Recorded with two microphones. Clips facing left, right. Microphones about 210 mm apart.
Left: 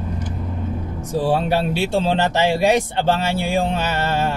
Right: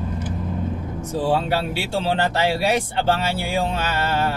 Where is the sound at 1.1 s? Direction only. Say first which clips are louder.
Left 2 dB; 15° left (ahead or behind).